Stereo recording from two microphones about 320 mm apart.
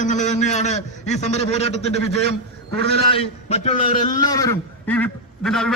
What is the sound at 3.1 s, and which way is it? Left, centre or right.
A man's voice, centre.